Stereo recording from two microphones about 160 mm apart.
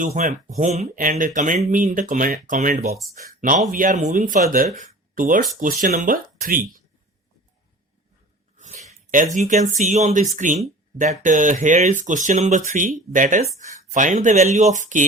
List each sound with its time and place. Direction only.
0.0 s speech: 50° right (ahead or behind)
8.5 s a sound: 50° right (ahead or behind)
8.9 s speech: 55° right (ahead or behind)